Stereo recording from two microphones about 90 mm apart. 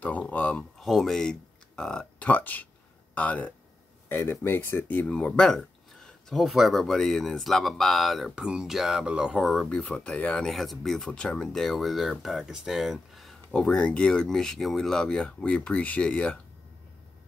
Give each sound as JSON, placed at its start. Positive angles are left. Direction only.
{"t": 0.3, "sound": "speech", "side_deg": 15}
{"t": 0.7, "sound": "speech", "side_deg": 0}
{"t": 9.7, "sound": "speech", "side_deg": 15}
{"t": 10.5, "sound": "speech", "side_deg": 0}